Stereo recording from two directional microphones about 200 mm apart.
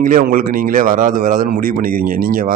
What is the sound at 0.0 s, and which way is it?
A man's voice, 45° right (ahead or behind).